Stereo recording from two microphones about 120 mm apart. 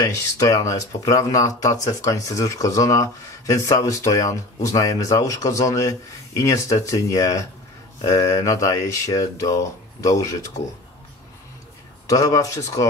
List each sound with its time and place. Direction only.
0.0 s speech: 25° left (ahead or behind)
12.1 s speech: 30° left (ahead or behind)